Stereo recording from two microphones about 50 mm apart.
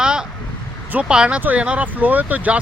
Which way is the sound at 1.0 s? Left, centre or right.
Centre.